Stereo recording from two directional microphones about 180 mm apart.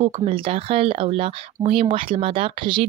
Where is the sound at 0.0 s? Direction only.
30° right (ahead or behind).